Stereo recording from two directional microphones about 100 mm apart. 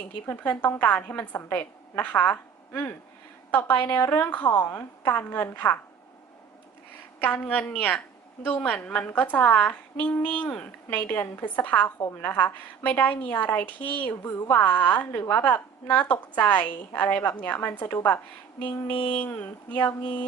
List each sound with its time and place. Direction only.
0.3 s a woman's voice: 15° left (ahead or behind)
7.2 s a woman's voice: 15° left (ahead or behind)